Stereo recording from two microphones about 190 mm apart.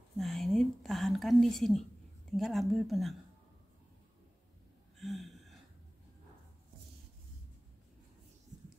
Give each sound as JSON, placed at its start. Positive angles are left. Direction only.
{"t": 0.2, "sound": "speech", "side_deg": 0}
{"t": 4.9, "sound": "gasp", "side_deg": 0}